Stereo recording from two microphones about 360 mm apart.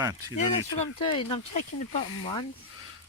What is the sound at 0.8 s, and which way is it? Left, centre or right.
Speech, centre.